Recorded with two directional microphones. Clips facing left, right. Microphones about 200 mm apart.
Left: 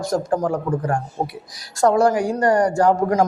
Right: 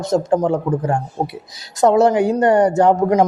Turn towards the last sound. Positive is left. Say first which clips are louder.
# right 3 dB
turn(degrees=-20)  # may be behind; listen again after turning